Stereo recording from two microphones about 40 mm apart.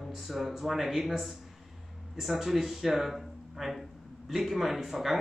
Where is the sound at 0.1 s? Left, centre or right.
Centre.